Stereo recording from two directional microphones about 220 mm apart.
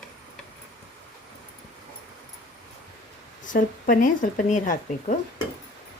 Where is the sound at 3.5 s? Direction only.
40° left (ahead or behind).